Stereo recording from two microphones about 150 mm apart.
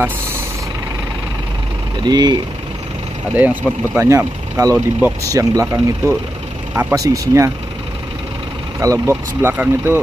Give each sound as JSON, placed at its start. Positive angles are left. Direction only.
{"t": 2.0, "sound": "speech", "side_deg": -30}
{"t": 3.3, "sound": "speech", "side_deg": -10}
{"t": 8.7, "sound": "speech", "side_deg": -20}